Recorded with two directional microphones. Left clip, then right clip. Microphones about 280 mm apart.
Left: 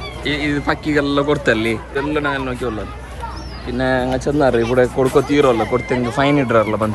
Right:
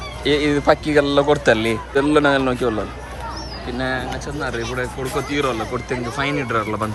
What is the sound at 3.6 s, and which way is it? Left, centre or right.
Speech, centre.